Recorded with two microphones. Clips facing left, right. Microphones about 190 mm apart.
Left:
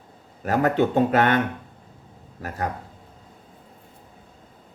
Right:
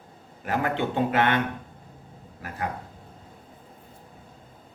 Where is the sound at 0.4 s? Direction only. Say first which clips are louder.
Left 6 dB; 40° left (ahead or behind).